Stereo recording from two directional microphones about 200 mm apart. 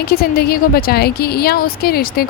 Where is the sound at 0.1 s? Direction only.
50° left (ahead or behind).